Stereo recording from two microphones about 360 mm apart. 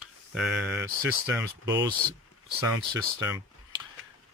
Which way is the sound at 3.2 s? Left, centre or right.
Centre.